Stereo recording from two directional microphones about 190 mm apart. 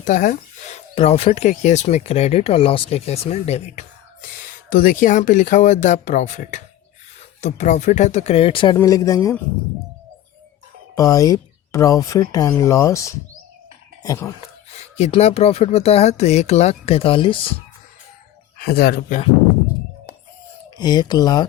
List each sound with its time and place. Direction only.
0.0 s bird: 45° left (ahead or behind)
0.9 s speech: 30° left (ahead or behind)
10.9 s speech: 20° left (ahead or behind)
14.4 s speech: 35° left (ahead or behind)
18.5 s speech: 55° left (ahead or behind)
20.7 s speech: 20° left (ahead or behind)